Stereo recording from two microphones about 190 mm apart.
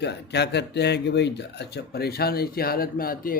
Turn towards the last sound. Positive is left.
turn(degrees=50)  # may be behind; listen again after turning